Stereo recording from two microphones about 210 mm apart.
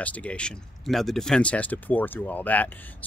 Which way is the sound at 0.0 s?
5° left (ahead or behind).